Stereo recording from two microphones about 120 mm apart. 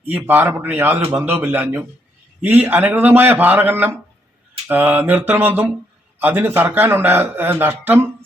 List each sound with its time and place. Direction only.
0.1 s a man's voice: 15° right (ahead or behind)